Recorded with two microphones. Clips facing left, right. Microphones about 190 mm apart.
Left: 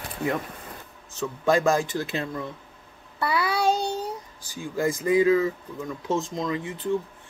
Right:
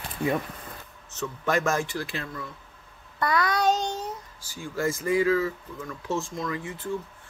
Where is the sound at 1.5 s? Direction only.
30° left (ahead or behind).